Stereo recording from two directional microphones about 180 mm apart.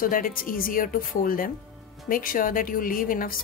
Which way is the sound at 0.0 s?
50° left (ahead or behind).